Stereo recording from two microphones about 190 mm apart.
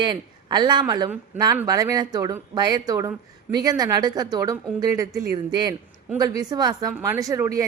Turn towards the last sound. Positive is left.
turn(degrees=-15)  # may be behind; listen again after turning